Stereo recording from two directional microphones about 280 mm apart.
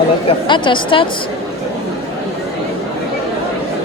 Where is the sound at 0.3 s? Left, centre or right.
Centre.